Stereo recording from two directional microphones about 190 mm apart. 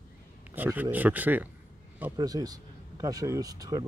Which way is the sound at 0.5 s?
10° right (ahead or behind).